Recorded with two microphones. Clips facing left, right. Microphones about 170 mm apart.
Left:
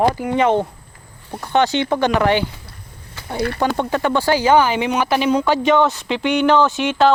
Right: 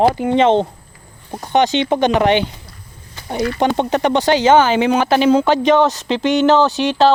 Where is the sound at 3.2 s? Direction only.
20° right (ahead or behind).